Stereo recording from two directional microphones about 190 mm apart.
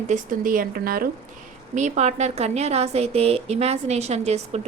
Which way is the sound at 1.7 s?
40° right (ahead or behind).